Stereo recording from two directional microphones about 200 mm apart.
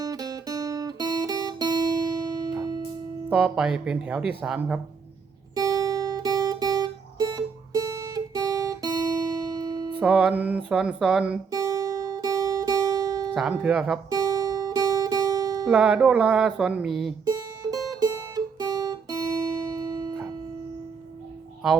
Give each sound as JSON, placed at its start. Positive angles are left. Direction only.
{"t": 0.0, "sound": "guitar", "side_deg": -20}
{"t": 3.2, "sound": "speech", "side_deg": -5}
{"t": 5.5, "sound": "music", "side_deg": -15}
{"t": 10.0, "sound": "music", "side_deg": -5}
{"t": 10.7, "sound": "speech", "side_deg": -5}
{"t": 11.5, "sound": "music", "side_deg": -15}
{"t": 13.3, "sound": "speech", "side_deg": -5}
{"t": 14.1, "sound": "music", "side_deg": -20}
{"t": 15.7, "sound": "speech", "side_deg": -5}
{"t": 17.2, "sound": "music", "side_deg": -20}